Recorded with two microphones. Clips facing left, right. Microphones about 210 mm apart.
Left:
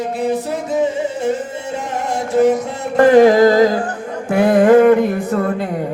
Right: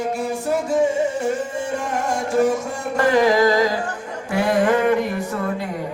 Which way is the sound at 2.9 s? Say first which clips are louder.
Left 8 dB; 55° left (ahead or behind).